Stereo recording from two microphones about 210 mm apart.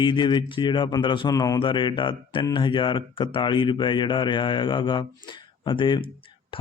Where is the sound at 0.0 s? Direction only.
20° left (ahead or behind).